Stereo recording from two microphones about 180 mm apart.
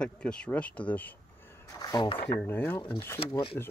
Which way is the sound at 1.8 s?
25° left (ahead or behind).